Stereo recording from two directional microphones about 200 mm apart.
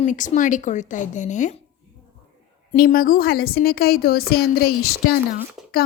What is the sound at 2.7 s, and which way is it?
A woman's voice, 45° left (ahead or behind).